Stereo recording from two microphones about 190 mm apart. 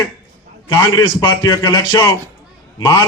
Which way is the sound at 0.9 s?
20° left (ahead or behind).